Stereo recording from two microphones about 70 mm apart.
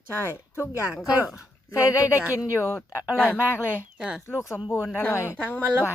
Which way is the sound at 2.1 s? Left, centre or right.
Right.